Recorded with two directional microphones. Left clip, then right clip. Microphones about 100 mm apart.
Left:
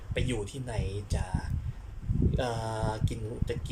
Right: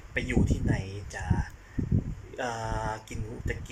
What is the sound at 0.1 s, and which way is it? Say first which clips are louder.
Speech: right 2 dB; 25° left (ahead or behind).